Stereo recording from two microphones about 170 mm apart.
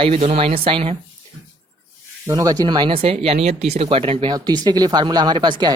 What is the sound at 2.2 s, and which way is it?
Speech, 20° right (ahead or behind).